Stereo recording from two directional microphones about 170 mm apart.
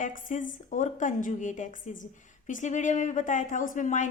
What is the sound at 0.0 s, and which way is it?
A woman's voice, 50° left (ahead or behind).